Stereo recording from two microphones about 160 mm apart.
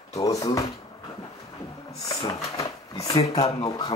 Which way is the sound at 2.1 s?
20° left (ahead or behind).